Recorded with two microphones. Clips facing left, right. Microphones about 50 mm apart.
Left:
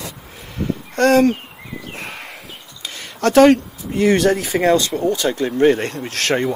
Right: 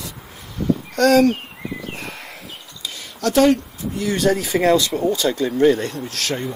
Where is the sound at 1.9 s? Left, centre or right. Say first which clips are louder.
Left 1 dB; left.